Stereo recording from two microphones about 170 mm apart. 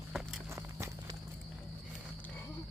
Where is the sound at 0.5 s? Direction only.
15° right (ahead or behind).